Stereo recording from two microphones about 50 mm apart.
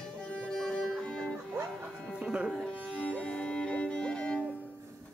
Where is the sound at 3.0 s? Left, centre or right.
Left.